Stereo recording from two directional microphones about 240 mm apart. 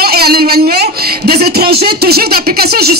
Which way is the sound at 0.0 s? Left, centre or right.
Right.